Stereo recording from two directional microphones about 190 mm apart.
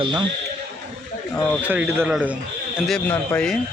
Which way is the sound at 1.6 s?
10° right (ahead or behind).